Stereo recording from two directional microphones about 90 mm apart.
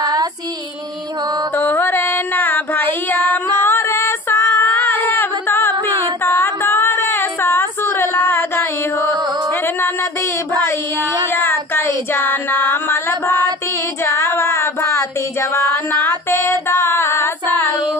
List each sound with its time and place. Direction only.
0.0 s female singing: 45° right (ahead or behind)
1.6 s child singing: 25° left (ahead or behind)
11.7 s a sound: 25° left (ahead or behind)
14.0 s child singing: 30° left (ahead or behind)
16.3 s female singing: 30° left (ahead or behind)